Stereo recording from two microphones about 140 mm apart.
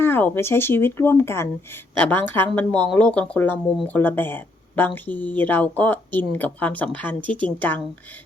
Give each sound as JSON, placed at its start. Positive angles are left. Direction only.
{"t": 0.0, "sound": "speech", "side_deg": 15}